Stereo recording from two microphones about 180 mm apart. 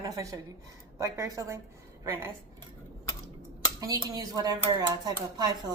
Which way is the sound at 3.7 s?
20° right (ahead or behind).